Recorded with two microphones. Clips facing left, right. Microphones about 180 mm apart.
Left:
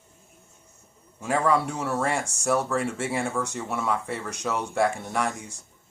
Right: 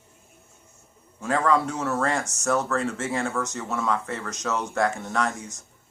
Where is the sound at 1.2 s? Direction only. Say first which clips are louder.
Right 1 dB; 10° left (ahead or behind).